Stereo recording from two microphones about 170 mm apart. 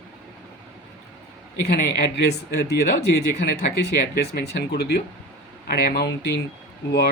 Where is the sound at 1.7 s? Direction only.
70° left (ahead or behind).